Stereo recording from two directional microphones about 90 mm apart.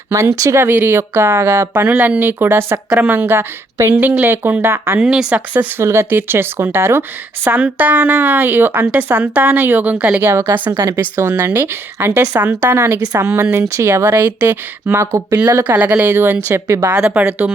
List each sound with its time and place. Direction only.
0.1 s speech: 35° right (ahead or behind)
0.6 s speech: 25° right (ahead or behind)
4.9 s speech: 5° right (ahead or behind)
5.5 s speech: 25° right (ahead or behind)
10.2 s speech: 25° right (ahead or behind)
14.3 s speech: 20° right (ahead or behind)
15.0 s speech: 40° right (ahead or behind)
15.6 s speech: 15° right (ahead or behind); by 16.9 s 30° right (ahead or behind)
16.9 s speech: 15° right (ahead or behind)